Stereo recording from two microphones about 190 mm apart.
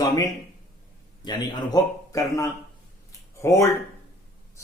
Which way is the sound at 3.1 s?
15° left (ahead or behind).